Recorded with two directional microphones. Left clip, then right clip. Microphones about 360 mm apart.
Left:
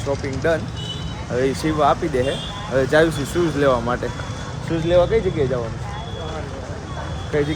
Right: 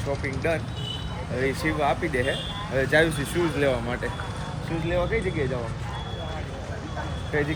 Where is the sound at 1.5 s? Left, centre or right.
Centre.